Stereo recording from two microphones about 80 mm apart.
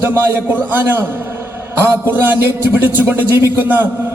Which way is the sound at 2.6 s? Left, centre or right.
Right.